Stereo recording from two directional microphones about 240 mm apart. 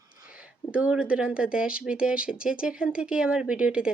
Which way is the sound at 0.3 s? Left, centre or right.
Centre.